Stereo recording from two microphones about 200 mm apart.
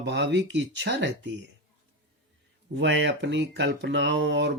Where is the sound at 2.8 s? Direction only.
60° right (ahead or behind).